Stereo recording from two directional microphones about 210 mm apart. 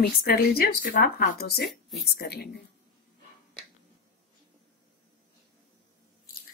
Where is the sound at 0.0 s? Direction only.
45° left (ahead or behind).